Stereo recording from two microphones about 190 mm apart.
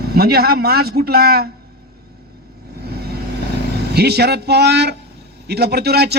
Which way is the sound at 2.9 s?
55° right (ahead or behind).